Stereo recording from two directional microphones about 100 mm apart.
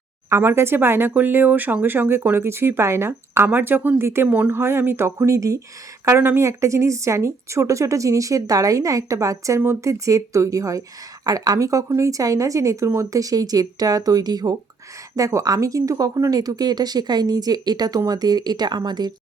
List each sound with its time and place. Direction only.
0.3 s speech: 25° right (ahead or behind); by 19.1 s 45° right (ahead or behind)